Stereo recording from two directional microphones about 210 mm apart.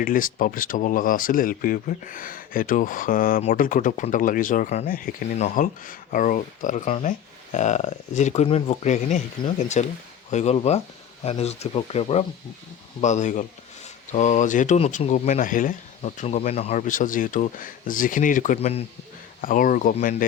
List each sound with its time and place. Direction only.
0.0 s speech: 40° left (ahead or behind)